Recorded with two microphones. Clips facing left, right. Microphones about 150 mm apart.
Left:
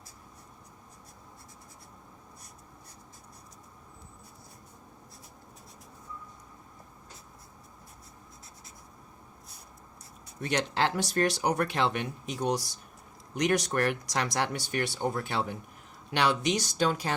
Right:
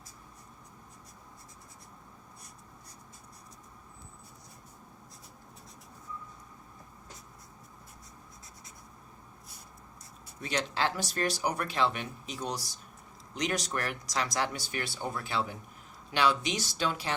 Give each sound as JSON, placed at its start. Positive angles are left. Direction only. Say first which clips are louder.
{"t": 10.4, "sound": "speech", "louder": "left 3 dB", "side_deg": 60}
{"t": 16.6, "sound": "speech", "louder": "left 5 dB", "side_deg": 45}